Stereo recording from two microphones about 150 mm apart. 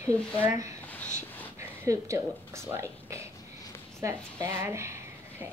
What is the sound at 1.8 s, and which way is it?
A woman's voice, 20° right (ahead or behind).